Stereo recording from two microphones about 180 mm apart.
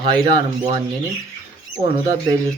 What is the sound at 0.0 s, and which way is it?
Speech, 25° right (ahead or behind).